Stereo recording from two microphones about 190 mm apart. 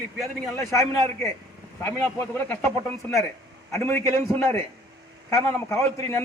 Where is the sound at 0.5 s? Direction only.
15° left (ahead or behind).